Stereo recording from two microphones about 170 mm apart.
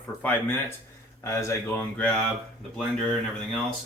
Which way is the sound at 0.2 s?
10° left (ahead or behind).